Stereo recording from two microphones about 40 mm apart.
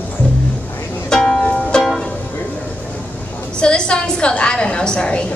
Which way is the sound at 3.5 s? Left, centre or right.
Left.